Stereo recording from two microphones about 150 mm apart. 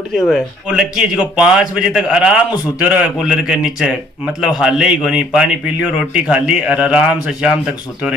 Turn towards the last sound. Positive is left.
turn(degrees=-5)  # may be behind; listen again after turning